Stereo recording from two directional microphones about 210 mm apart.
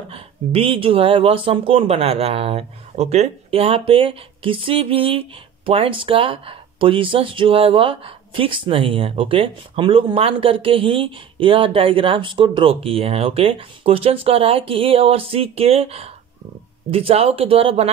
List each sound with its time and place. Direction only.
0.1 s speech: 25° right (ahead or behind)